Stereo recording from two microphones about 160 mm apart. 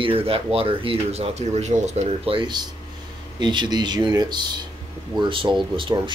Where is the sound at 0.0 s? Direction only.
35° right (ahead or behind).